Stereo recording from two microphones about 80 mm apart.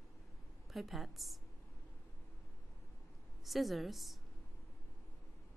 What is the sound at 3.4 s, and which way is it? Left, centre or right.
Speech, centre.